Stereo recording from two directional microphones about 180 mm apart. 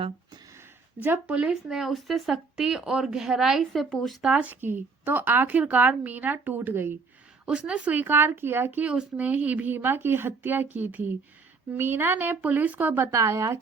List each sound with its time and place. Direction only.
0.9 s speech: 10° right (ahead or behind)